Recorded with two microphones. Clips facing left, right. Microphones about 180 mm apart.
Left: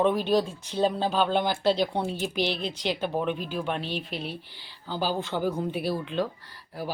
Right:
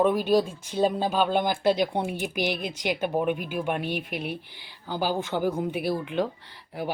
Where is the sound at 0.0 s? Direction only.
10° right (ahead or behind).